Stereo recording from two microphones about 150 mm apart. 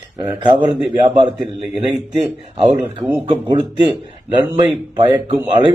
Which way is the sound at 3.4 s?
30° right (ahead or behind).